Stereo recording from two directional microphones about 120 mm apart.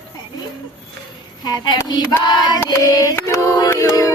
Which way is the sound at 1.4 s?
35° left (ahead or behind).